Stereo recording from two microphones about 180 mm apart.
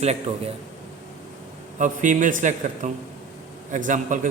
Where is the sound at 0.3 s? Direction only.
35° right (ahead or behind).